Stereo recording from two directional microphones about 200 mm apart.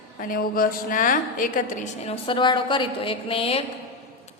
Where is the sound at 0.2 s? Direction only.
45° left (ahead or behind).